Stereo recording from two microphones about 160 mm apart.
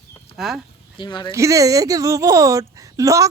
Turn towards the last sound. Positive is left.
turn(degrees=-20)  # may be behind; listen again after turning